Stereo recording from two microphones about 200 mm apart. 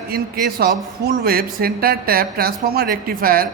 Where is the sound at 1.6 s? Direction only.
50° right (ahead or behind).